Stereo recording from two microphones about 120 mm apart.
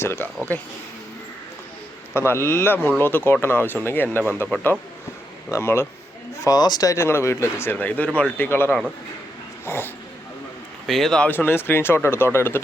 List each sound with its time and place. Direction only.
0.0 s speech: 20° left (ahead or behind)
2.1 s speech: 20° left (ahead or behind)
6.4 s speech: 35° left (ahead or behind)
10.8 s speech: centre (ahead or behind)
11.3 s speech: 20° left (ahead or behind)